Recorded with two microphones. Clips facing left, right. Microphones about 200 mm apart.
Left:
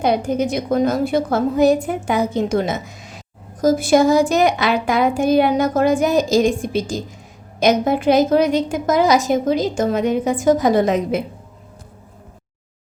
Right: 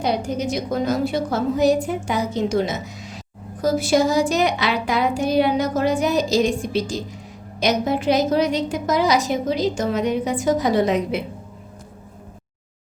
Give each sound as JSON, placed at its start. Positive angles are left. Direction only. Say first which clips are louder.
{"t": 0.0, "sound": "a woman's voice", "louder": "left 4 dB", "side_deg": 55}